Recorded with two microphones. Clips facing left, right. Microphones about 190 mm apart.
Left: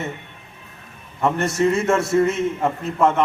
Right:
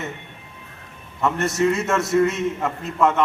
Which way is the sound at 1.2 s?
30° left (ahead or behind).